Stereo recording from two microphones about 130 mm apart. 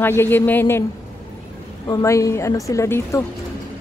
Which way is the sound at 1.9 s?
25° left (ahead or behind).